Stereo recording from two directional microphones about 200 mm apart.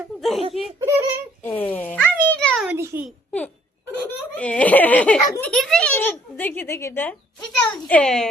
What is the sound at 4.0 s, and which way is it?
Giggle, 10° left (ahead or behind).